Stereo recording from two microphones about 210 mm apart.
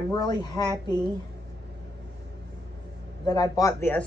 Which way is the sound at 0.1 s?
20° left (ahead or behind).